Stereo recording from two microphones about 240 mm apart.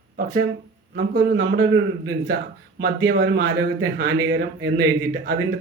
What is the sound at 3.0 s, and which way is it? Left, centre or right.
A man's voice, right.